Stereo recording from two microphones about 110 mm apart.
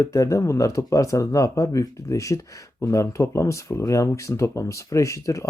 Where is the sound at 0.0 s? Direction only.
30° left (ahead or behind).